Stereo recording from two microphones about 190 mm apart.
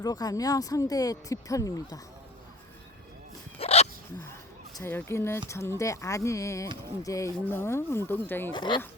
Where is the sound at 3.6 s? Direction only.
35° left (ahead or behind).